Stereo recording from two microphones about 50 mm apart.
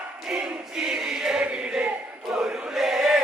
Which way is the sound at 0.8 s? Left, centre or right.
Centre.